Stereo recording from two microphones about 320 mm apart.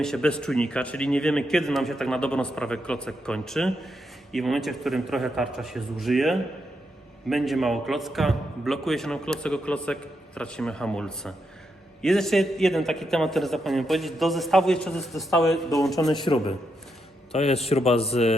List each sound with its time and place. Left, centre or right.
0.0 s a man's voice: centre
16.2 s a man's voice: centre